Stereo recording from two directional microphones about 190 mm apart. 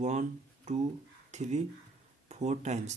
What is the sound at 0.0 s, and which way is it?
Speech, 40° right (ahead or behind).